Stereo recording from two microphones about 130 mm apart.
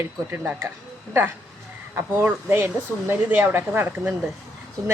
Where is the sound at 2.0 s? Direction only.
15° right (ahead or behind).